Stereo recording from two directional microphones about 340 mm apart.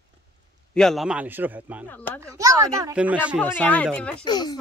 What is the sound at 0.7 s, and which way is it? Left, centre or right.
Speech, centre.